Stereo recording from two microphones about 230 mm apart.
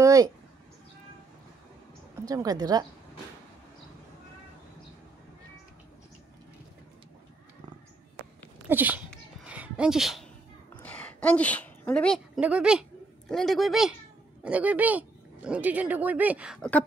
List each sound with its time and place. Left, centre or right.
0.0 s speech: centre
2.2 s speech: centre
8.6 s a sound: centre
12.4 s speech: centre